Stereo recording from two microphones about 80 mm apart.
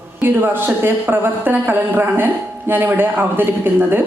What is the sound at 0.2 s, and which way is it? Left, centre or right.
Speech, right.